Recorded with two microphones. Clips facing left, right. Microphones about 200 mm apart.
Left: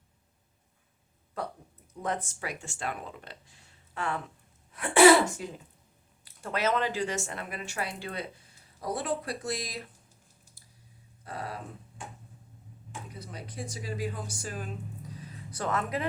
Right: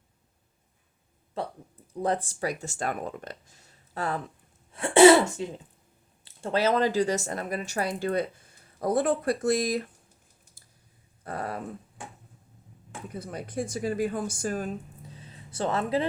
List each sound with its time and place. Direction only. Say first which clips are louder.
1.4 s speech: right 3 dB; 25° right (ahead or behind)
4.7 s speech: right 3 dB; 25° right (ahead or behind); by 9.9 s 50° right (ahead or behind)
11.2 s a sound: right 5 dB; 50° right (ahead or behind)
12.9 s speech: right 6 dB; 50° right (ahead or behind)
15.0 s vehicle: left 3 dB; 25° right (ahead or behind)